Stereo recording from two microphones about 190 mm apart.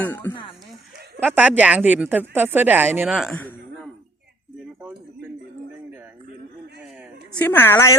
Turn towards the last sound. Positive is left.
turn(degrees=15)  # may be behind; listen again after turning